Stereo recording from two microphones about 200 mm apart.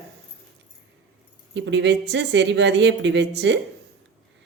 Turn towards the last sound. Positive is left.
turn(degrees=-60)  # may be behind; listen again after turning